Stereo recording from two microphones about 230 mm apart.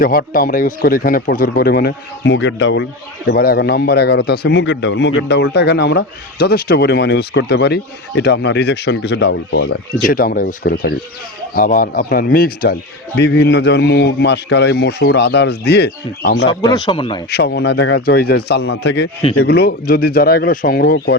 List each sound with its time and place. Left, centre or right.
0.0 s a man's voice: left
16.5 s speech: centre
17.3 s a man's voice: left